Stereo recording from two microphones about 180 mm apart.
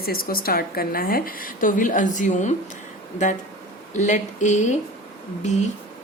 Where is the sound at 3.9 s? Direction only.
45° left (ahead or behind).